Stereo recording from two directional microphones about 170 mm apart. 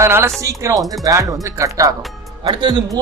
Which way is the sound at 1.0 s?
20° right (ahead or behind).